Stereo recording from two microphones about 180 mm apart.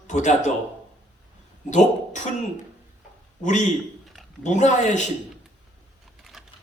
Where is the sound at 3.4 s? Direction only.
40° left (ahead or behind).